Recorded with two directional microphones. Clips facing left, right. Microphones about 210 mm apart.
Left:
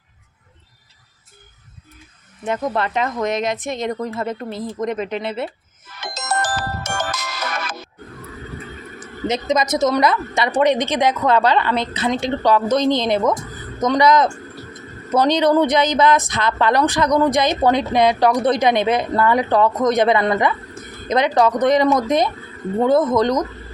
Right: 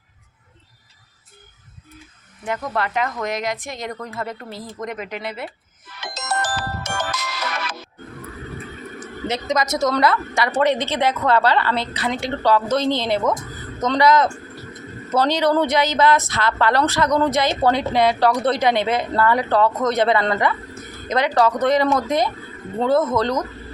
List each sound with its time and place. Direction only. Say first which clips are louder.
2.4 s speech: left 3 dB; 20° left (ahead or behind)
5.8 s music: left 2 dB; 45° left (ahead or behind)
9.2 s speech: left 3 dB; 20° left (ahead or behind)